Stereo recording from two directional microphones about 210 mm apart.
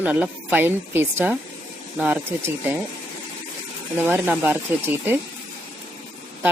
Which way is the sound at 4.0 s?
10° right (ahead or behind).